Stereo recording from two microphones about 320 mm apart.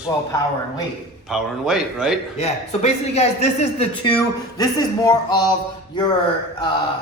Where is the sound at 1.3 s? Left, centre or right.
Centre.